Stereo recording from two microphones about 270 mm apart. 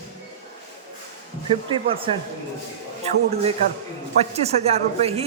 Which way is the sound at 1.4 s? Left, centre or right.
Centre.